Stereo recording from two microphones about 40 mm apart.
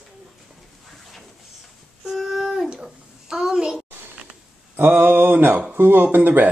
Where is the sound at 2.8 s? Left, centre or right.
Centre.